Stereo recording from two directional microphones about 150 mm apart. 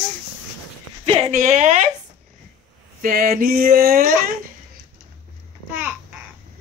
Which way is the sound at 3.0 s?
75° right (ahead or behind).